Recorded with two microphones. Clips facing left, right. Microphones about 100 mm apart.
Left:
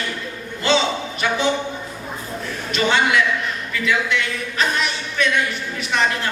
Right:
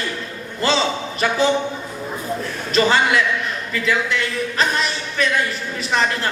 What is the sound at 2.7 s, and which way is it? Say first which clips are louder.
Speech: right 2 dB; 35° right (ahead or behind).